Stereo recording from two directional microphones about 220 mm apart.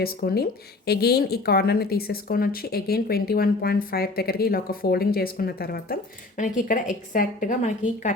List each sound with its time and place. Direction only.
0.0 s a woman's voice: 45° left (ahead or behind)